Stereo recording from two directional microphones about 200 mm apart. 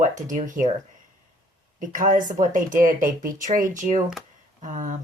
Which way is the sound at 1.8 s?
40° right (ahead or behind).